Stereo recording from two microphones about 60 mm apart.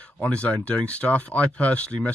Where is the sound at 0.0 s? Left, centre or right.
Centre.